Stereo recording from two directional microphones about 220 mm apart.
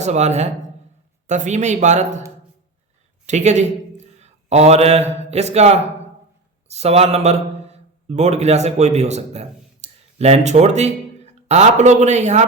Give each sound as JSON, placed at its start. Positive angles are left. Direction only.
{"t": 0.0, "sound": "a man's voice", "side_deg": -30}
{"t": 3.2, "sound": "a sound", "side_deg": -30}
{"t": 5.2, "sound": "a man's voice", "side_deg": -30}